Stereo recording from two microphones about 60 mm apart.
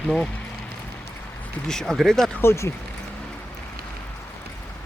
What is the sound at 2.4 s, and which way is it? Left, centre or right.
Speech, left.